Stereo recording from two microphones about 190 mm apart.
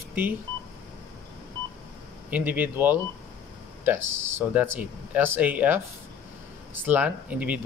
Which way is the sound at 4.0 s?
90° right.